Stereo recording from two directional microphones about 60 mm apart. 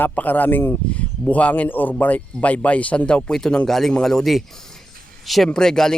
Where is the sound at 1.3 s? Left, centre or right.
Left.